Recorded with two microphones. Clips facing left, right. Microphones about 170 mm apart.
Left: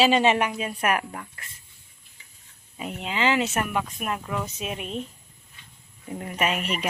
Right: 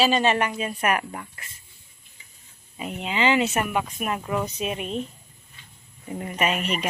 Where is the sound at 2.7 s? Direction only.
5° right (ahead or behind).